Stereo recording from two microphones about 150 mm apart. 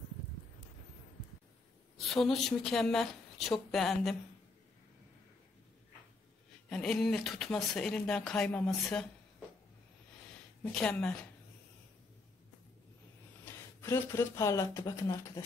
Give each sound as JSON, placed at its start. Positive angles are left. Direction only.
{"t": 2.0, "sound": "speech", "side_deg": 0}
{"t": 6.7, "sound": "speech", "side_deg": 5}
{"t": 10.6, "sound": "a woman's voice", "side_deg": 5}
{"t": 13.7, "sound": "speech", "side_deg": 15}